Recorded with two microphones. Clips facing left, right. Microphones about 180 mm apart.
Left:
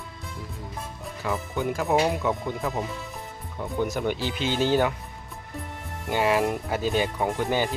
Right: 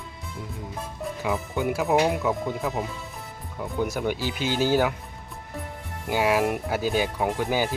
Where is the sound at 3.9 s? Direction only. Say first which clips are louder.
Even; 5° right (ahead or behind).